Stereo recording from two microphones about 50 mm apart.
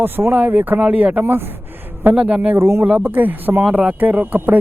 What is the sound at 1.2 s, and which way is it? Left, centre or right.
Speech, right.